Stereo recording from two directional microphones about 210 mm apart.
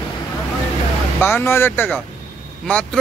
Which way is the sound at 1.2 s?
10° left (ahead or behind).